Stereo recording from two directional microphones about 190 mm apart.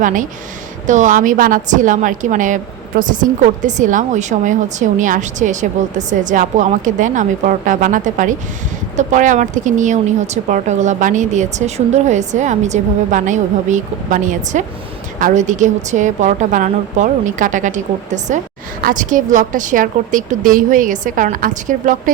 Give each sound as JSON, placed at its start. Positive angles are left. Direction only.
{"t": 0.0, "sound": "speech", "side_deg": -45}